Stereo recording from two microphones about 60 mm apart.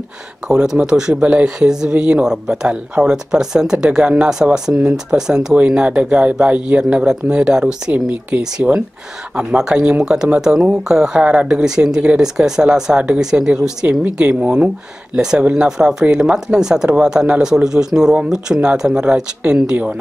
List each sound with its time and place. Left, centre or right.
0.5 s speech: centre
7.9 s speech: right
8.6 s speech: centre
15.6 s speech: centre